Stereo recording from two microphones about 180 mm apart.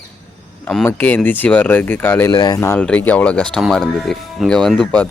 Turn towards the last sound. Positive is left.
turn(degrees=5)  # may be behind; listen again after turning